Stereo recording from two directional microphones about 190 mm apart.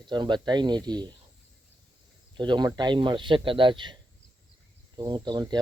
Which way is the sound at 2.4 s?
25° right (ahead or behind).